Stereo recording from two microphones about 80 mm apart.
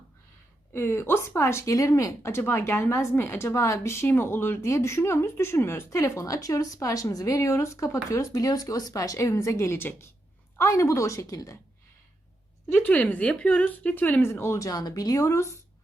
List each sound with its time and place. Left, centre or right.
0.7 s speech: left
12.7 s a woman's voice: left
14.2 s speech: left
14.7 s speech: left